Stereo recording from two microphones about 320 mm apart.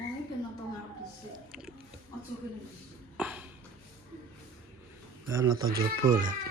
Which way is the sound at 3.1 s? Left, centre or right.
Centre.